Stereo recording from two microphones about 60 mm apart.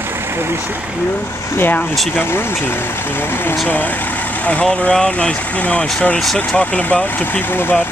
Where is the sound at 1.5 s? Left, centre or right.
Left.